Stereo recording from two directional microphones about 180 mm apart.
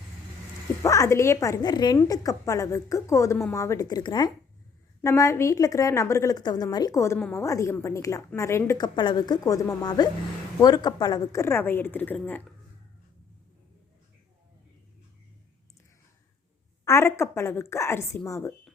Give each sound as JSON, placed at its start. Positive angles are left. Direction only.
{"t": 0.8, "sound": "a woman's voice", "side_deg": 15}
{"t": 16.8, "sound": "a woman's voice", "side_deg": 15}